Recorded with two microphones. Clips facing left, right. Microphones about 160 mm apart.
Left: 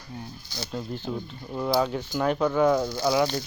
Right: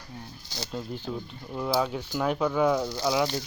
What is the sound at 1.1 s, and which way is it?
Speech, 5° left (ahead or behind).